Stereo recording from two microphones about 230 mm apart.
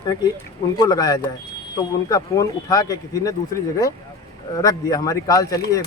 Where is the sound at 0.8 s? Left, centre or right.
Centre.